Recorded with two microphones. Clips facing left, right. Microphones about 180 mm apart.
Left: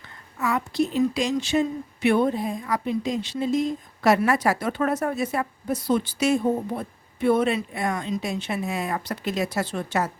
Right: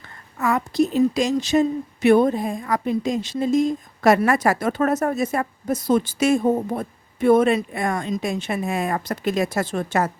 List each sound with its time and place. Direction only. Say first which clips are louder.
0.3 s a woman's voice: right 4 dB; 45° right (ahead or behind)